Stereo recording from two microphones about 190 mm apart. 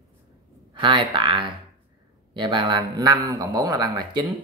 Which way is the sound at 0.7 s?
25° right (ahead or behind).